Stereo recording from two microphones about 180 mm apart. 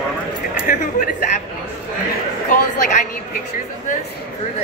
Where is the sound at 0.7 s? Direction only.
45° left (ahead or behind).